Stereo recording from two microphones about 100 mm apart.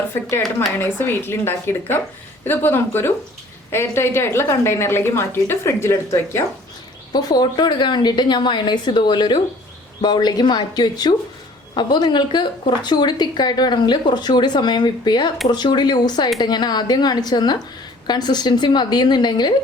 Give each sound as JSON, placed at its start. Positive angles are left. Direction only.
{"t": 0.1, "sound": "a woman's voice", "side_deg": 25}
{"t": 7.1, "sound": "a woman's voice", "side_deg": 40}